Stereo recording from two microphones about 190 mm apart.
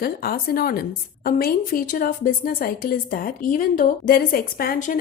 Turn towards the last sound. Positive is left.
turn(degrees=50)  # may be behind; listen again after turning